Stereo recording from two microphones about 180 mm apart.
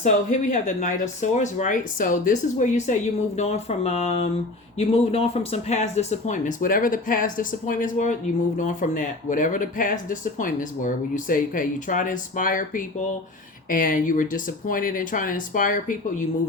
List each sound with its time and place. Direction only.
0.0 s speech: 45° left (ahead or behind)